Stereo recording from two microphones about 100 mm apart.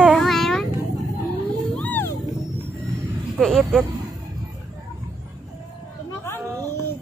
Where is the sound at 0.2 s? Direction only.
5° left (ahead or behind).